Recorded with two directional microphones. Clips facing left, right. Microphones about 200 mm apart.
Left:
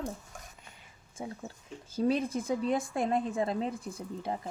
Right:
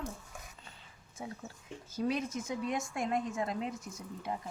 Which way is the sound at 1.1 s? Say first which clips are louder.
Left 3 dB; 30° left (ahead or behind).